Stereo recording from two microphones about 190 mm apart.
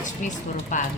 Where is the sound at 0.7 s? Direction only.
40° left (ahead or behind).